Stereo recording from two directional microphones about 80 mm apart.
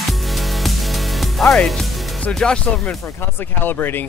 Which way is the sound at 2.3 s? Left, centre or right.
Centre.